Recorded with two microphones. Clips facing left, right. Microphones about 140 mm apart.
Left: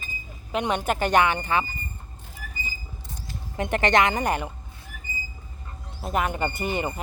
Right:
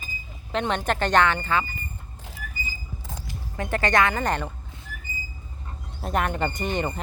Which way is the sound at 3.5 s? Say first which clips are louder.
Left 2 dB; 20° left (ahead or behind).